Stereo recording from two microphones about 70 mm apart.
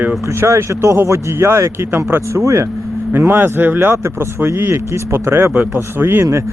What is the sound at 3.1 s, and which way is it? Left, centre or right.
Speech, right.